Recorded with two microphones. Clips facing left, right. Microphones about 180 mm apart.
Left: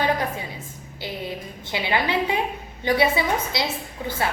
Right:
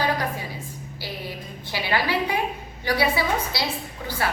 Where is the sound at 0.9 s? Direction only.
20° left (ahead or behind).